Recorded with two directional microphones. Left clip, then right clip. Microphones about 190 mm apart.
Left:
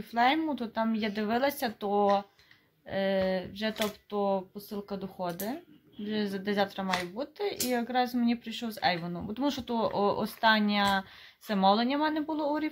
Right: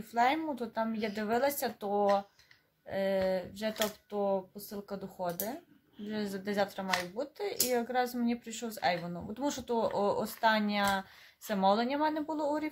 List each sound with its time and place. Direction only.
0.1 s speech: centre (ahead or behind)